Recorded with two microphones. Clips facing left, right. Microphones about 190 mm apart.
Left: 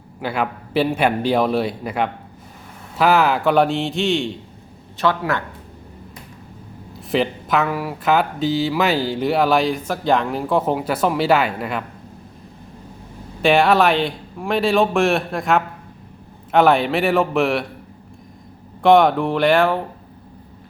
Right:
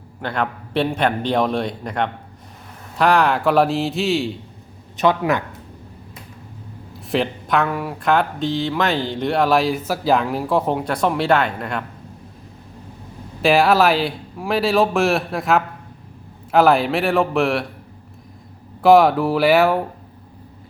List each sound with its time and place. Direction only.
0.2 s a man's voice: 5° left (ahead or behind)
4.9 s speech: 15° right (ahead or behind)
7.1 s speech: centre (ahead or behind)
13.4 s speech: centre (ahead or behind)
18.8 s speech: 5° right (ahead or behind)